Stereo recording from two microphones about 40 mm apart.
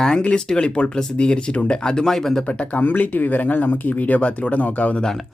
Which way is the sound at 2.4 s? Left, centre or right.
Left.